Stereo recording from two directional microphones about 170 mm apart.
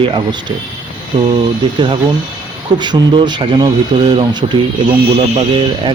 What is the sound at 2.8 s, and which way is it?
Speech, 25° right (ahead or behind).